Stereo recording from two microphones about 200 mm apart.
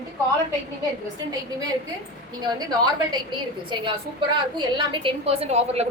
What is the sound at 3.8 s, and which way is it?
A woman's voice, 25° right (ahead or behind).